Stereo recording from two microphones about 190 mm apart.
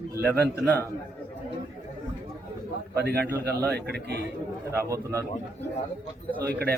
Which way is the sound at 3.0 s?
60° right (ahead or behind).